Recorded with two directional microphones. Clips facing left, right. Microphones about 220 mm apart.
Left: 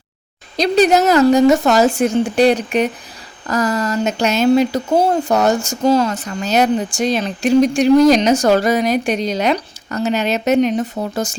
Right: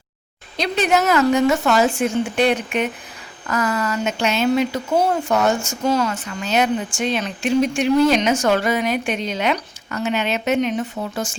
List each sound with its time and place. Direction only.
0.5 s speech: 40° left (ahead or behind)